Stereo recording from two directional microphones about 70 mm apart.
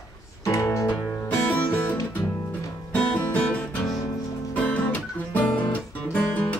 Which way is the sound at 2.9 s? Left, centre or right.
Left.